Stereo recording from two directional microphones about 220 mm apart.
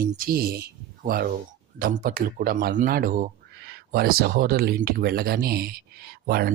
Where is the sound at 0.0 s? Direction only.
40° right (ahead or behind).